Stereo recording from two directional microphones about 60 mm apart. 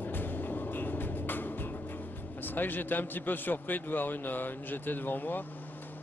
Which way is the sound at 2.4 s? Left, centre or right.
Left.